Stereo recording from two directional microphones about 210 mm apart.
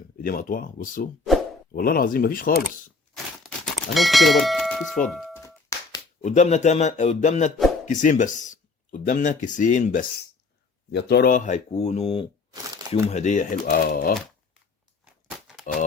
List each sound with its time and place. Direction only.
0.2 s speech: 45° left (ahead or behind)
3.9 s speech: centre (ahead or behind)
5.1 s music: centre (ahead or behind)
5.4 s music: 15° left (ahead or behind)
6.2 s speech: 35° left (ahead or behind)
10.9 s speech: 50° left (ahead or behind)
15.7 s speech: 35° left (ahead or behind)